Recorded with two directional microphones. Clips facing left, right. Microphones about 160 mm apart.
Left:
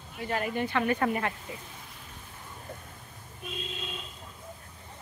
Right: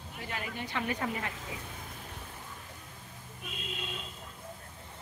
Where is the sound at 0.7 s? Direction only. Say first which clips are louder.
Left 5 dB; 65° left (ahead or behind).